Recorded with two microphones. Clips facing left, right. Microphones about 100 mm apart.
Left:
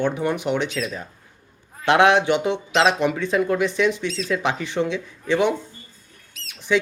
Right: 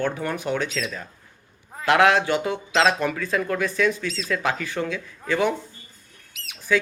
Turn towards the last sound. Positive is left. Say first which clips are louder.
# left 2 dB
turn(degrees=20)  # may be behind; listen again after turning